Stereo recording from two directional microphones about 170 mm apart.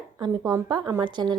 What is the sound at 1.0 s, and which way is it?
Speech, 25° right (ahead or behind).